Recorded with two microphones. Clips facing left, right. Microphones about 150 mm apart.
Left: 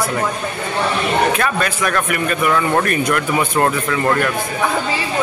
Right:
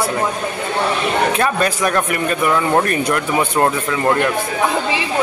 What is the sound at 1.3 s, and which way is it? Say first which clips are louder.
Speech: right 2 dB; 30° right (ahead or behind).